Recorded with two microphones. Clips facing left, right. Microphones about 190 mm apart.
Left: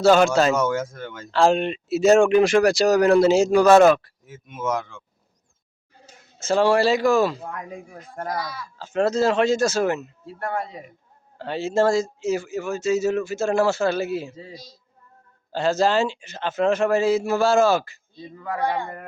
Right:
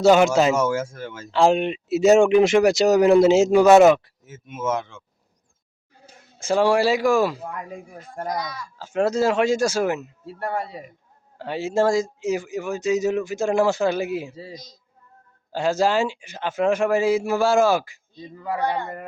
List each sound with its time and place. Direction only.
0.0 s a man's voice: 20° right (ahead or behind)
4.3 s speech: 5° right (ahead or behind)
6.4 s a man's voice: 10° right (ahead or behind)
8.4 s speech: 5° left (ahead or behind)
8.8 s a man's voice: 10° right (ahead or behind)
11.3 s a man's voice: 10° right (ahead or behind)